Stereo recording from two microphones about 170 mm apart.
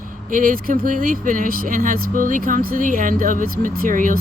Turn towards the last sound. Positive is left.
turn(degrees=-50)  # may be behind; listen again after turning